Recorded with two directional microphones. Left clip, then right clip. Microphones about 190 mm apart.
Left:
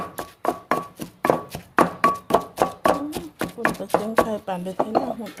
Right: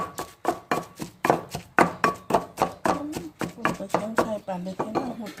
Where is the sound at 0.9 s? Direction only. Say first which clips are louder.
Left 2 dB; 5° left (ahead or behind).